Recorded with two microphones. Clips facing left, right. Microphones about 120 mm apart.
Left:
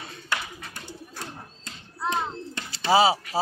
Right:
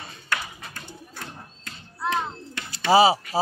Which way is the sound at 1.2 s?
30° left (ahead or behind).